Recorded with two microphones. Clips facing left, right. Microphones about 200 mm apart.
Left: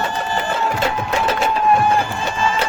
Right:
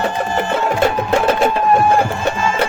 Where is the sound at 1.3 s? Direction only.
55° right (ahead or behind).